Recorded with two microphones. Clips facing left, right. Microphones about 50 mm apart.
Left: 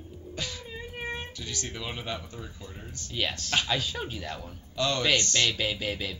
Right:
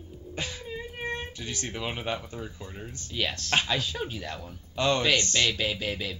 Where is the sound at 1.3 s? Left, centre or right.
Right.